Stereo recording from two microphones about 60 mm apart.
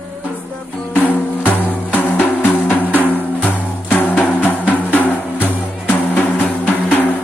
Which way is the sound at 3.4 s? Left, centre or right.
Left.